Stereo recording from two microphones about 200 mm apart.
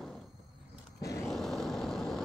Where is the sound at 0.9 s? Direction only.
15° left (ahead or behind).